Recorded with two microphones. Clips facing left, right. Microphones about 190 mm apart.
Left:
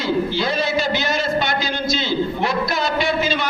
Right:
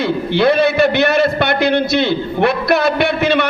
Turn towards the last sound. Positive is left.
turn(degrees=-65)  # may be behind; listen again after turning